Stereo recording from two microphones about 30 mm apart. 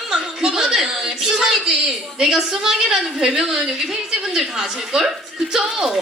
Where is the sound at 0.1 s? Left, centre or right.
Centre.